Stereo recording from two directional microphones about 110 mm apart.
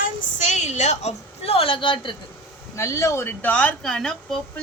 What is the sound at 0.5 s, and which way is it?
A woman's voice, 90° left.